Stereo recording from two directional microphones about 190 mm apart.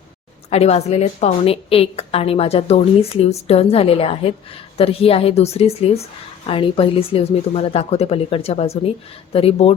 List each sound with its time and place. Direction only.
0.5 s a woman's voice: 35° left (ahead or behind)